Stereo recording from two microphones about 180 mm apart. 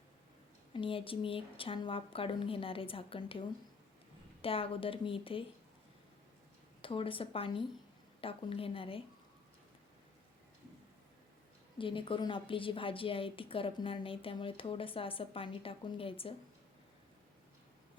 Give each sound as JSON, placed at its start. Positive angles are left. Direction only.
{"t": 0.7, "sound": "a woman's voice", "side_deg": 30}
{"t": 4.4, "sound": "speech", "side_deg": 30}
{"t": 6.8, "sound": "a woman's voice", "side_deg": 30}
{"t": 11.8, "sound": "a woman's voice", "side_deg": 30}